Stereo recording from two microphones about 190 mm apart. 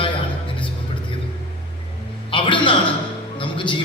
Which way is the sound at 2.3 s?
25° left (ahead or behind).